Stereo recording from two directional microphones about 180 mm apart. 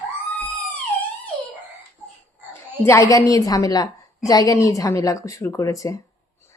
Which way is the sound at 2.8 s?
15° left (ahead or behind).